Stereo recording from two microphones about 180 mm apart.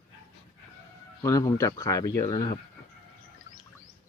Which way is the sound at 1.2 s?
20° left (ahead or behind).